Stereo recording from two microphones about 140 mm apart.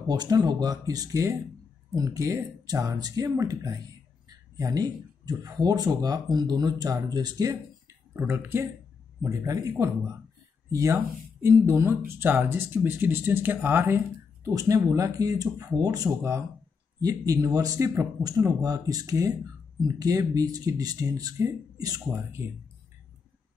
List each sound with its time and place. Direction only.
0.0 s speech: 30° right (ahead or behind)
8.1 s speech: 15° right (ahead or behind)